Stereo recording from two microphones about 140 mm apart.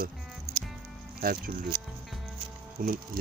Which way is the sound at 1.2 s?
90° right.